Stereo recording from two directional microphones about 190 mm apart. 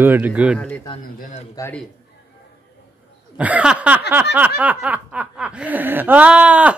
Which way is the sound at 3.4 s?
5° right (ahead or behind).